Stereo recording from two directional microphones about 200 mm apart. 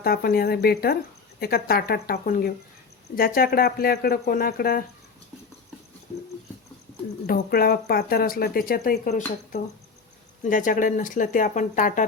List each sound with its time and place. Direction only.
0.0 s speech: 50° left (ahead or behind)
7.3 s speech: 50° left (ahead or behind)